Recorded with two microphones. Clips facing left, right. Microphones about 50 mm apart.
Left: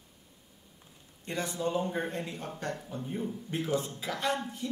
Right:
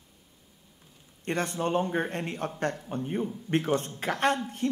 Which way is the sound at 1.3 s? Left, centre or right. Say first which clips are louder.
Right 4 dB; right.